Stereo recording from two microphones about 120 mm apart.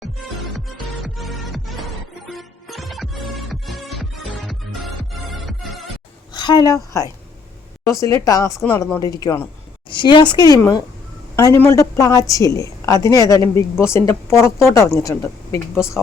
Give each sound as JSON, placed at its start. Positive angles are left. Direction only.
{"t": 1.0, "sound": "music", "side_deg": 0}
{"t": 6.3, "sound": "speech", "side_deg": 35}
{"t": 8.6, "sound": "speech", "side_deg": 15}
{"t": 9.9, "sound": "speech", "side_deg": 40}